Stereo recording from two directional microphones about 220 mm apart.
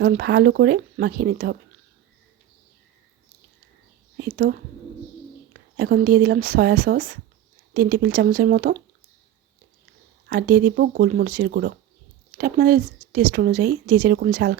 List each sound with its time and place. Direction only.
0.0 s speech: 45° right (ahead or behind)
4.2 s speech: 40° right (ahead or behind)
5.5 s speech: 45° right (ahead or behind)
10.2 s a woman's voice: 40° right (ahead or behind)